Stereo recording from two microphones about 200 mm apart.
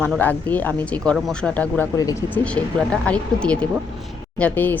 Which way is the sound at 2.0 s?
20° left (ahead or behind).